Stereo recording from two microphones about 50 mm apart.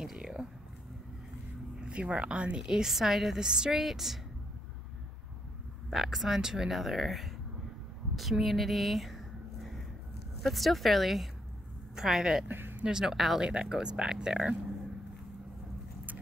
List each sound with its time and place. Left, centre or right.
0.0 s a sound: centre
1.8 s a woman's voice: centre
5.9 s speech: centre
8.2 s a sound: centre
10.4 s a woman's voice: centre
12.4 s speech: right
12.8 s a woman's voice: centre
13.4 s a woman's voice: centre